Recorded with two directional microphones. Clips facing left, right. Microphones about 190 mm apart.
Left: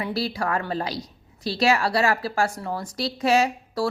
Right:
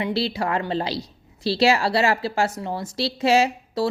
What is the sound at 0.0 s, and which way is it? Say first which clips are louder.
A woman's voice: right 3 dB; 25° right (ahead or behind).